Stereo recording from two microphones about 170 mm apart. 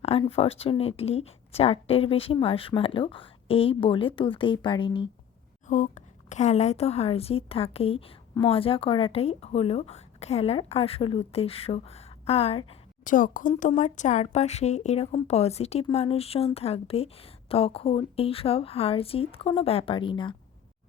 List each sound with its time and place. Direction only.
0.0 s a woman's voice: 35° left (ahead or behind)
5.6 s a woman's voice: 45° left (ahead or behind)
13.1 s a woman's voice: 50° left (ahead or behind); by 20.3 s 30° left (ahead or behind)